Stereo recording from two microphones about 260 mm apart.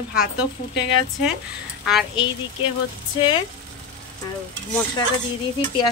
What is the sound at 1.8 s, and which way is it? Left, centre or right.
Speech, centre.